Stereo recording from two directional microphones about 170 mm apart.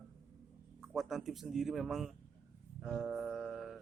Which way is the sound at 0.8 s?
Centre (ahead or behind).